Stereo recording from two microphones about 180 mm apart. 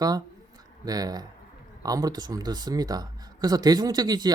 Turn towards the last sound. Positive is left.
turn(degrees=-20)  # may be behind; listen again after turning